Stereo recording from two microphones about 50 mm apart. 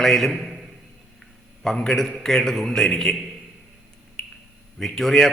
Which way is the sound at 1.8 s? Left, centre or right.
Centre.